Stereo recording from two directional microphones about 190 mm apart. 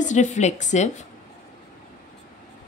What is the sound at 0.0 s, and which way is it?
Speech, 40° left (ahead or behind).